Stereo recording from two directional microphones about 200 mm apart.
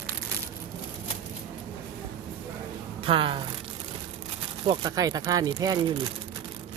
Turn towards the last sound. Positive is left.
turn(degrees=-20)  # may be behind; listen again after turning